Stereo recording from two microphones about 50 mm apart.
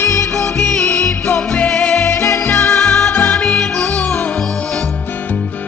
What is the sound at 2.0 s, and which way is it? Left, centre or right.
Music, left.